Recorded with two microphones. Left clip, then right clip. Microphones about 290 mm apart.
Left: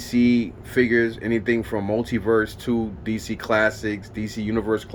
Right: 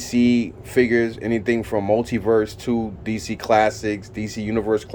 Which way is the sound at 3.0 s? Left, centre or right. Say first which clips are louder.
Right 1 dB; right.